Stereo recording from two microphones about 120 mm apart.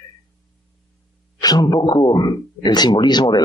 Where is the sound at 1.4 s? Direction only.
30° left (ahead or behind).